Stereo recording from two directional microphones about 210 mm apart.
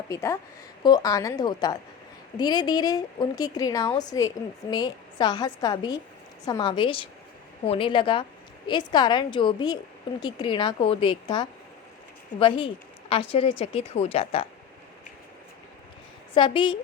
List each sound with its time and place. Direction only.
0.1 s a woman's voice: 15° left (ahead or behind)
16.3 s speech: 25° left (ahead or behind)